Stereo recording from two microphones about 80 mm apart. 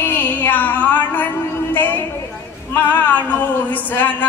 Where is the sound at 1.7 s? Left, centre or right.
Left.